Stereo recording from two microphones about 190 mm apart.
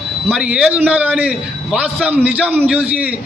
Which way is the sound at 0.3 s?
5° right (ahead or behind).